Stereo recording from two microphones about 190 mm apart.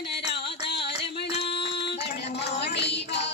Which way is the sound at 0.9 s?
60° left (ahead or behind).